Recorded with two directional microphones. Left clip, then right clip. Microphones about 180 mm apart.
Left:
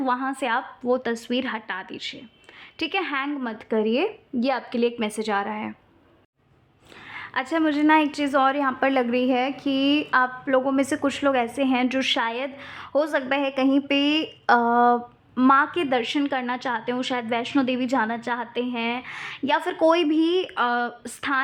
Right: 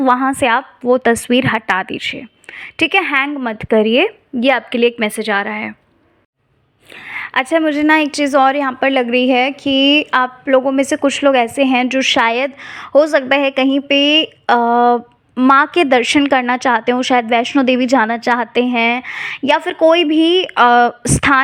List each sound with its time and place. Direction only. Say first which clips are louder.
0.0 s a woman's voice: right 12 dB; 30° right (ahead or behind)
7.0 s a sound: right 11 dB; 20° right (ahead or behind)
7.5 s a woman's voice: right 6 dB; 20° right (ahead or behind); by 21.4 s 35° right (ahead or behind)